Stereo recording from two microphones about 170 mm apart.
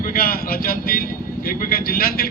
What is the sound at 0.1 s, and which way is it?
A man's voice, 60° left (ahead or behind).